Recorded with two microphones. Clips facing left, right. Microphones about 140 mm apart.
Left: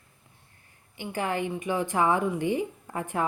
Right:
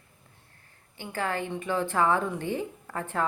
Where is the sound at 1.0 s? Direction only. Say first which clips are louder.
Left 2 dB; 15° left (ahead or behind).